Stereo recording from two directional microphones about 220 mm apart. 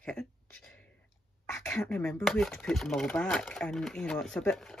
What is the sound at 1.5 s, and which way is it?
Speech, 5° left (ahead or behind).